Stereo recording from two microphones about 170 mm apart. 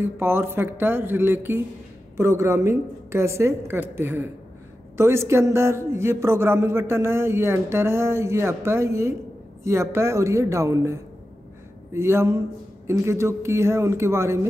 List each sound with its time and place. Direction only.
0.0 s speech: 15° right (ahead or behind)